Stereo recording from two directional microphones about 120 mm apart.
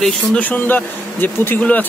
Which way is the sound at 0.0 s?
10° left (ahead or behind).